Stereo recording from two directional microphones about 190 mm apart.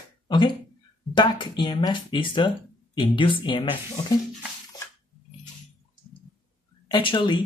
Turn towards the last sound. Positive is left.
turn(degrees=25)  # may be behind; listen again after turning